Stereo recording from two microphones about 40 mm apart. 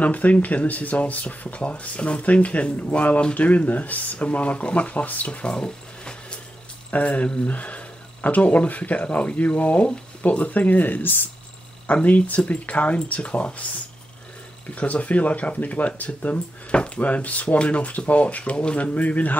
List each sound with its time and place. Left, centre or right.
0.0 s speech: left
5.5 s a sound: left
6.9 s speech: left
11.9 s speech: left
14.8 s speech: left
16.7 s speech: left
17.0 s speech: left